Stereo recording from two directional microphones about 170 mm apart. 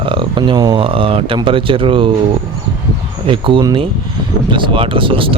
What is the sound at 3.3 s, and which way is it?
Speech, 30° right (ahead or behind).